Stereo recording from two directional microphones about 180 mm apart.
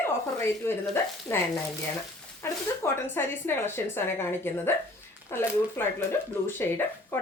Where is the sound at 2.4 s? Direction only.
10° left (ahead or behind).